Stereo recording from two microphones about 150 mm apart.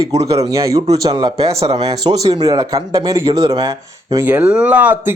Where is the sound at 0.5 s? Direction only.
20° right (ahead or behind).